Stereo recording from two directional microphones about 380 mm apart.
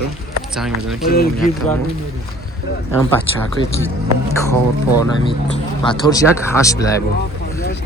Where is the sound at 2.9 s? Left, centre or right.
Centre.